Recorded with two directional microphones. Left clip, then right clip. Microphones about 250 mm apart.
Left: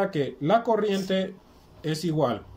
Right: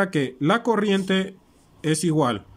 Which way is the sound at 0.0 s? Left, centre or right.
Right.